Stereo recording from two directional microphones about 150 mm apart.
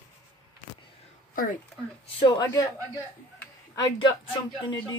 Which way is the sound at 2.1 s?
30° left (ahead or behind).